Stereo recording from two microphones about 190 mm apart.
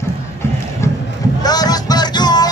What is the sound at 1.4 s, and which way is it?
Music, 20° left (ahead or behind).